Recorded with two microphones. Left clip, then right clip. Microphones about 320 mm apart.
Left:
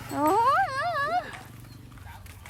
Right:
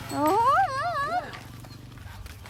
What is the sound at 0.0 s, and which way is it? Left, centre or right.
Dog, centre.